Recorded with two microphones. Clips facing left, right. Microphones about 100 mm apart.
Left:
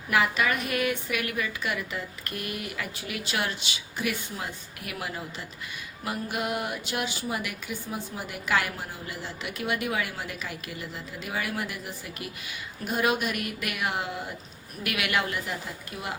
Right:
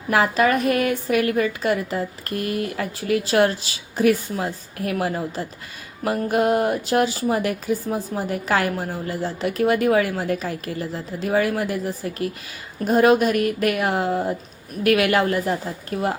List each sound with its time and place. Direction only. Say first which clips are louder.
0.1 s speech: right 7 dB; 40° right (ahead or behind)